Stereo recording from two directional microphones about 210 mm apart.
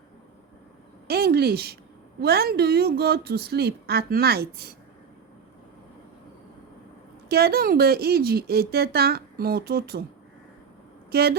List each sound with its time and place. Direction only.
1.0 s a woman's voice: 45° right (ahead or behind)
7.3 s a woman's voice: 45° right (ahead or behind)
11.1 s speech: 50° right (ahead or behind)